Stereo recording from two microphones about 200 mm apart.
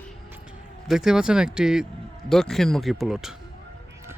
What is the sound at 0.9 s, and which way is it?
Speech, centre (ahead or behind).